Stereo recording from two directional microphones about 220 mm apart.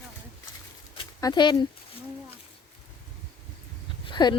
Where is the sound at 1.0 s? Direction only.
20° left (ahead or behind).